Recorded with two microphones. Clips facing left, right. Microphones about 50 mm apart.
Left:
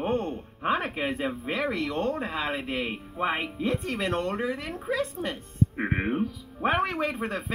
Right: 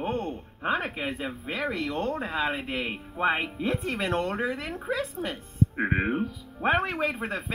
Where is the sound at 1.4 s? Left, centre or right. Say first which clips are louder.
Even; centre.